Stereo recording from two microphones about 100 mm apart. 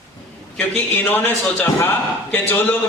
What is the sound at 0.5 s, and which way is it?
A man's voice, 20° left (ahead or behind).